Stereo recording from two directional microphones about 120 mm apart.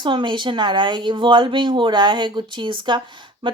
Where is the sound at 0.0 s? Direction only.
40° right (ahead or behind).